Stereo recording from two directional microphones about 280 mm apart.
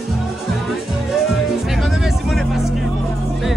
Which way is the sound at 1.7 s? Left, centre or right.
Centre.